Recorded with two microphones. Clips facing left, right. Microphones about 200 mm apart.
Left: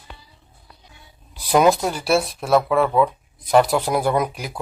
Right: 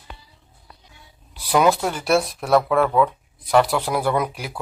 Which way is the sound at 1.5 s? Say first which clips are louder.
Left 2 dB; 15° left (ahead or behind).